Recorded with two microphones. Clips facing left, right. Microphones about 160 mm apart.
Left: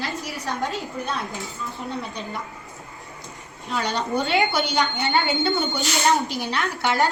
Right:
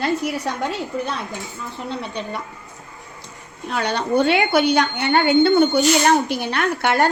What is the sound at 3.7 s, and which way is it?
A woman's voice, 65° right (ahead or behind).